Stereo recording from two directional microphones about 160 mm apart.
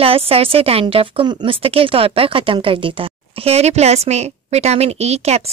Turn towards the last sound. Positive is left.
turn(degrees=-40)  # may be behind; listen again after turning